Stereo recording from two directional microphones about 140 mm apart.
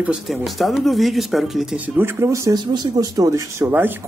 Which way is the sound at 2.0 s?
20° right (ahead or behind).